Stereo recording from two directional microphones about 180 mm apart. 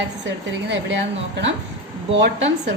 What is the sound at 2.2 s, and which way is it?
Speech, 80° right.